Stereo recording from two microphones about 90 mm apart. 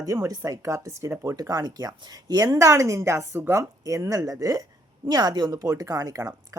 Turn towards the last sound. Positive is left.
turn(degrees=-40)  # may be behind; listen again after turning